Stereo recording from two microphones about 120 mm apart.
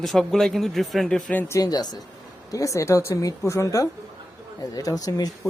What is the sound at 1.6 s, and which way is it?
Speech, 35° left (ahead or behind).